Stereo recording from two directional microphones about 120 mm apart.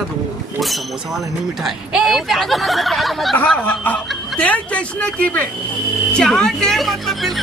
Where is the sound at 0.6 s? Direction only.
Centre (ahead or behind).